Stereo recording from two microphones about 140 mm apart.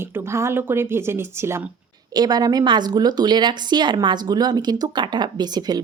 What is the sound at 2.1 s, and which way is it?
Speech, 30° right (ahead or behind).